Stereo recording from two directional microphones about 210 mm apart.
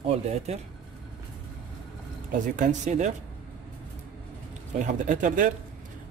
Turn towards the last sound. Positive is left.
turn(degrees=-40)  # may be behind; listen again after turning